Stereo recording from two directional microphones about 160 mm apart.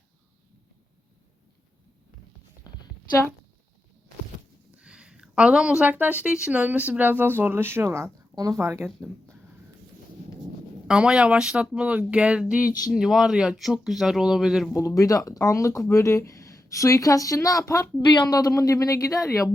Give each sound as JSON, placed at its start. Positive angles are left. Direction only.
{"t": 4.8, "sound": "a sound", "side_deg": -5}
{"t": 5.8, "sound": "speech", "side_deg": -10}
{"t": 8.9, "sound": "speech", "side_deg": 0}
{"t": 10.8, "sound": "speech", "side_deg": -5}
{"t": 12.6, "sound": "speech", "side_deg": 25}
{"t": 12.9, "sound": "speech", "side_deg": -5}
{"t": 14.7, "sound": "speech", "side_deg": 20}